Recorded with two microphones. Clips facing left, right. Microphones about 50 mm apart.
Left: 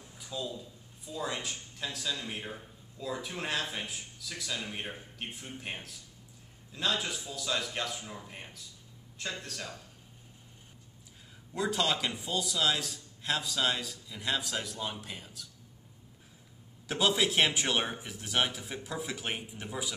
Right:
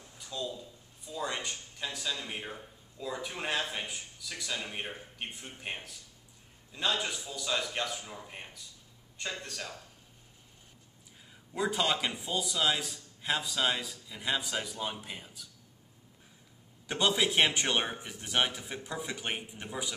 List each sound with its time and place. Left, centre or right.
0.0 s a man's voice: centre
11.5 s a man's voice: centre
16.8 s a man's voice: centre